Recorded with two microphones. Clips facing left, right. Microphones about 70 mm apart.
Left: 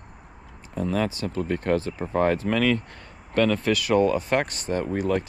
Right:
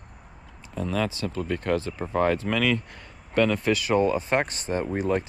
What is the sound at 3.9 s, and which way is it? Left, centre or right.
Speech, left.